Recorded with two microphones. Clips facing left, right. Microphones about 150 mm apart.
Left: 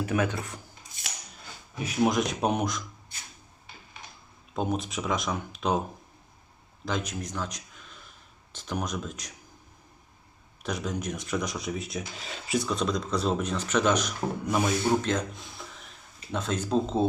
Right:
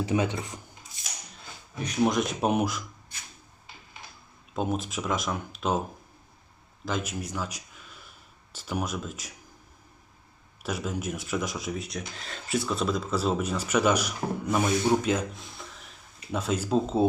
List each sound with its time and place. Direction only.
0.0 s speech: 20° right (ahead or behind)
1.3 s speech: centre (ahead or behind)
4.5 s speech: centre (ahead or behind)
6.8 s speech: 5° right (ahead or behind)
10.6 s speech: 5° right (ahead or behind)